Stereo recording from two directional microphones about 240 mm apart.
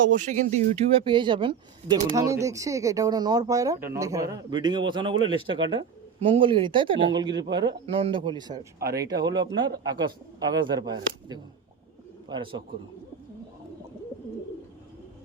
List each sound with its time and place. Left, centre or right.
0.1 s speech: right
8.8 s speech: right
9.0 s speech: centre
10.5 s speech: centre